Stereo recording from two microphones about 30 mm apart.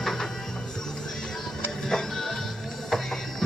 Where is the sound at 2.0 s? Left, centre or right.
Centre.